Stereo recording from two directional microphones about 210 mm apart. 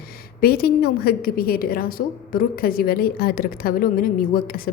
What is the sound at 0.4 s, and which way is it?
A woman's voice, 45° left (ahead or behind).